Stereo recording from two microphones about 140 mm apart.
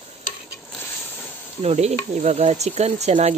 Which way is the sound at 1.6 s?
50° right (ahead or behind).